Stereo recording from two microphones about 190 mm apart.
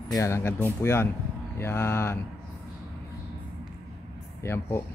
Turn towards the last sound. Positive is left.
turn(degrees=15)  # may be behind; listen again after turning